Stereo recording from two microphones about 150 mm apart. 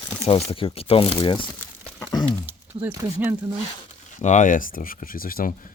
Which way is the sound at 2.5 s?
15° right (ahead or behind).